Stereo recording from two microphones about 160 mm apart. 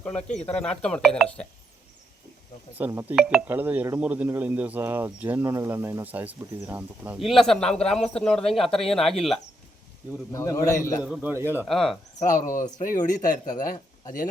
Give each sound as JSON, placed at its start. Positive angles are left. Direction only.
{"t": 0.0, "sound": "speech", "side_deg": 5}
{"t": 2.7, "sound": "speech", "side_deg": -15}
{"t": 7.2, "sound": "speech", "side_deg": 0}
{"t": 10.3, "sound": "a man's voice", "side_deg": 20}
{"t": 11.0, "sound": "speech", "side_deg": -10}
{"t": 11.6, "sound": "speech", "side_deg": 0}
{"t": 12.5, "sound": "speech", "side_deg": 55}